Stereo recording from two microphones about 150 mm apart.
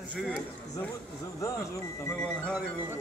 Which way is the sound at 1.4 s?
20° left (ahead or behind).